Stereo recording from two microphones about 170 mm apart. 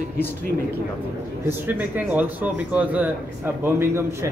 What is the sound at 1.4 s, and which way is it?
A man's voice, 10° right (ahead or behind).